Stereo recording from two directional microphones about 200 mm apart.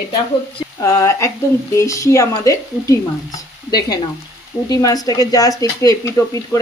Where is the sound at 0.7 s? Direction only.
15° left (ahead or behind).